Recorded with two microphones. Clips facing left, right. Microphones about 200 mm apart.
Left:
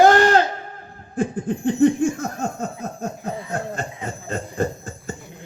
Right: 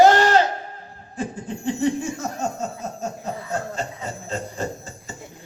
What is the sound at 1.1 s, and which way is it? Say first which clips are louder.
Laughter: left 6 dB; 55° left (ahead or behind).